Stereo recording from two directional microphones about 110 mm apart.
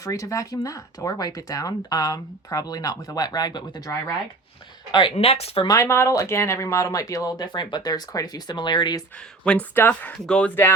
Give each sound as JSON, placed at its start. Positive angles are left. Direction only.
{"t": 0.0, "sound": "speech", "side_deg": 30}
{"t": 5.1, "sound": "speech", "side_deg": 70}
{"t": 5.6, "sound": "speech", "side_deg": 30}
{"t": 9.4, "sound": "speech", "side_deg": 15}